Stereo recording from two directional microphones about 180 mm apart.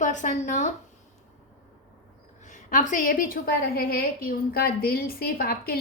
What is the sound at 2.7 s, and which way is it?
A woman's voice, 45° left (ahead or behind).